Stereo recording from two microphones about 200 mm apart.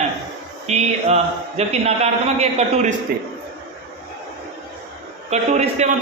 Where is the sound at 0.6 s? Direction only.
35° right (ahead or behind).